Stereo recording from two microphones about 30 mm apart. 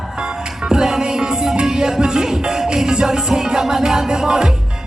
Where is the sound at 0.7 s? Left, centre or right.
Centre.